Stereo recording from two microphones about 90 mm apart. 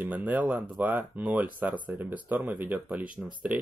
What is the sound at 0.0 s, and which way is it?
Speech, 20° right (ahead or behind).